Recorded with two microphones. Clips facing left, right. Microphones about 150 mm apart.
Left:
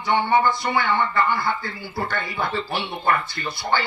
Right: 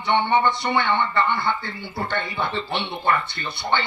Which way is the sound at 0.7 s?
25° right (ahead or behind).